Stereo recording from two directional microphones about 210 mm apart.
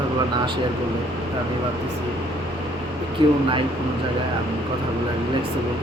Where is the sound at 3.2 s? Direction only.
25° right (ahead or behind).